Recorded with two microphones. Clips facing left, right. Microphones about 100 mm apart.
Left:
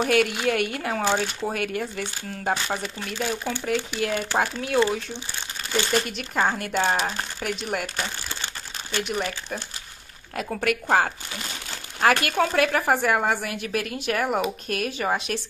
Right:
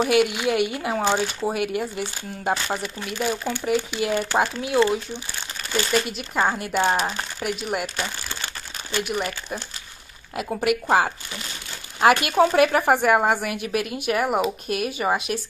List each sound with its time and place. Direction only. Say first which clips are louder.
0.0 s speech: right 2 dB; 10° right (ahead or behind)
5.9 s speech: right 1 dB; centre (ahead or behind)
8.9 s speech: right 1 dB; 5° right (ahead or behind)